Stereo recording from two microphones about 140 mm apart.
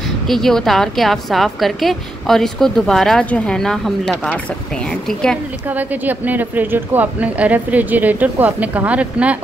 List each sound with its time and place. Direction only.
0.3 s speech: 5° left (ahead or behind)
5.7 s speech: 10° right (ahead or behind)